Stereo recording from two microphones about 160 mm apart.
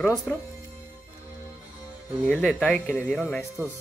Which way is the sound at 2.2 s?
10° left (ahead or behind).